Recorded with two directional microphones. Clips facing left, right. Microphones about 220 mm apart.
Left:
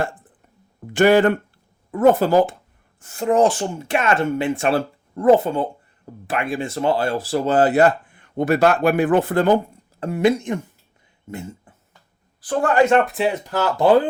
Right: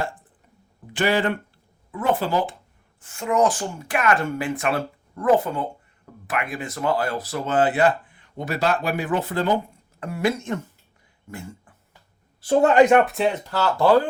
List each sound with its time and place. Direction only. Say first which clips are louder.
0.9 s speech: left 8 dB; 45° left (ahead or behind)
10.0 s speech: left 6 dB; 20° left (ahead or behind)
12.4 s a man's voice: right 2 dB; 25° right (ahead or behind)
13.1 s speech: left 1 dB; centre (ahead or behind)
13.4 s speech: left 2 dB; 15° left (ahead or behind)